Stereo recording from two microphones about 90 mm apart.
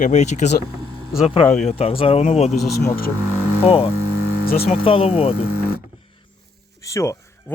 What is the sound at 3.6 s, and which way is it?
Speech, 90° left.